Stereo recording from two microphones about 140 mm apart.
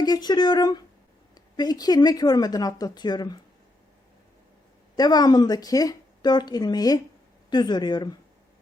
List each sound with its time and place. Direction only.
0.0 s speech: 30° left (ahead or behind)
4.9 s speech: 30° left (ahead or behind)